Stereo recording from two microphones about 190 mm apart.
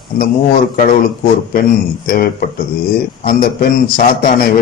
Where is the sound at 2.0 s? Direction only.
50° left (ahead or behind).